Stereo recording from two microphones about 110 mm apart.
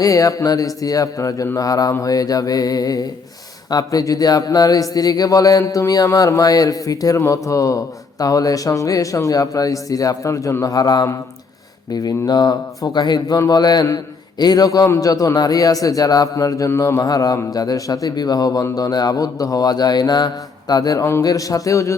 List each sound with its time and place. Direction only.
0.0 s speech: 30° left (ahead or behind)